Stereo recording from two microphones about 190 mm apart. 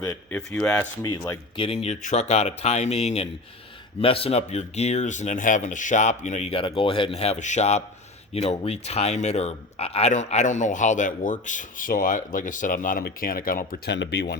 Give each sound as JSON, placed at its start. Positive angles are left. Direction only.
{"t": 0.0, "sound": "speech", "side_deg": 10}
{"t": 1.5, "sound": "speech", "side_deg": 30}